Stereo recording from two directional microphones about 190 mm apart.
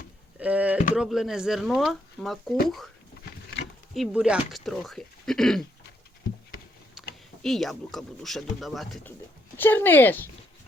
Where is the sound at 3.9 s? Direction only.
Centre (ahead or behind).